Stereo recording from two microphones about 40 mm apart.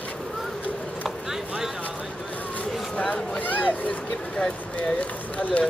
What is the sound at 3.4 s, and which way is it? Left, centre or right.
Chatter, left.